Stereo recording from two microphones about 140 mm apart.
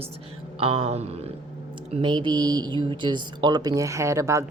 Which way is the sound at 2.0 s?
35° right (ahead or behind).